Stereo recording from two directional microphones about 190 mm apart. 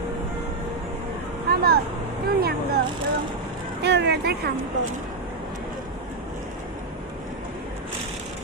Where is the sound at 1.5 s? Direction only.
55° right (ahead or behind).